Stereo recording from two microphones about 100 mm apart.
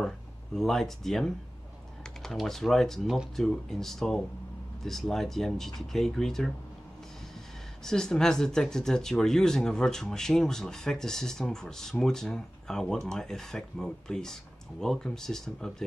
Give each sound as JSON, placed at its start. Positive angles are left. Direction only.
{"t": 0.6, "sound": "speech", "side_deg": 5}
{"t": 7.8, "sound": "speech", "side_deg": 5}